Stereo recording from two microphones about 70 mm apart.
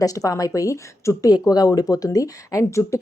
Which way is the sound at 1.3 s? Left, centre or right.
Left.